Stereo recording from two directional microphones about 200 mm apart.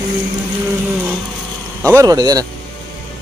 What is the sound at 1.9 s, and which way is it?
Speech, 20° right (ahead or behind).